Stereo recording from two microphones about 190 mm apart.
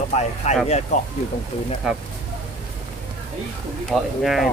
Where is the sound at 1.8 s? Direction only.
5° right (ahead or behind).